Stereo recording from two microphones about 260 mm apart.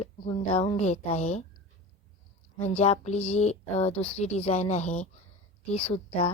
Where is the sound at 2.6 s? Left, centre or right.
Left.